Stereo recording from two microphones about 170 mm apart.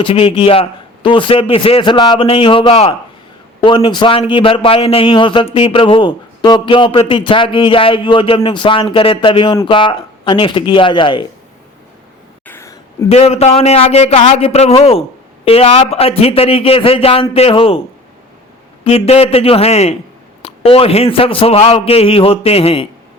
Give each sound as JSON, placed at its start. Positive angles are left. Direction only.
{"t": 0.0, "sound": "a man's voice", "side_deg": 35}
{"t": 12.5, "sound": "a sound", "side_deg": 15}
{"t": 13.1, "sound": "a man's voice", "side_deg": 40}
{"t": 18.9, "sound": "a man's voice", "side_deg": 35}